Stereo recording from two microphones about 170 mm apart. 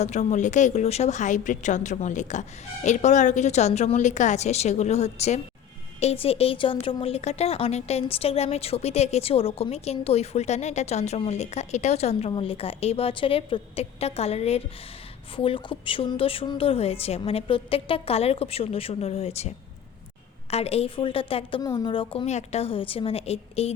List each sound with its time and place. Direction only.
0.0 s a woman's voice: 40° left (ahead or behind)